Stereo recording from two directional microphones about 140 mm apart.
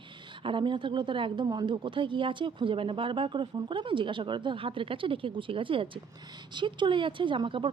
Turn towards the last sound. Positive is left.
turn(degrees=-35)  # may be behind; listen again after turning